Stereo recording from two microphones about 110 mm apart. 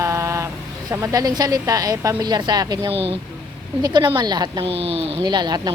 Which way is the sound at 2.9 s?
60° right (ahead or behind).